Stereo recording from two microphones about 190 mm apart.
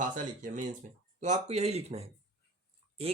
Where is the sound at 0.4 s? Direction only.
40° right (ahead or behind).